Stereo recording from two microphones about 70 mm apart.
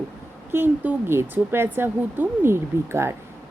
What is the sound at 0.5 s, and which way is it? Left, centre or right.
A woman's voice, right.